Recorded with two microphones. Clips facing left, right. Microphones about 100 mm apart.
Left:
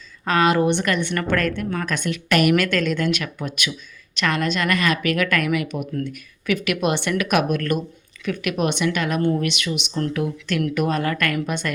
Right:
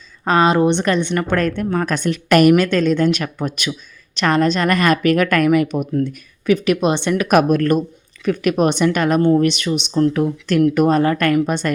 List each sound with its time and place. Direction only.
0.3 s speech: 30° right (ahead or behind)
2.6 s speech: 25° right (ahead or behind)
5.9 s speech: 25° right (ahead or behind)
7.3 s speech: 40° right (ahead or behind)